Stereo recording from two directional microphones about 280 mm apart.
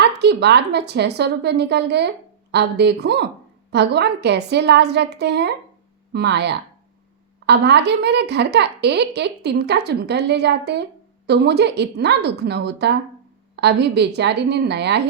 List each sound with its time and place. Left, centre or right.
0.0 s a woman's voice: right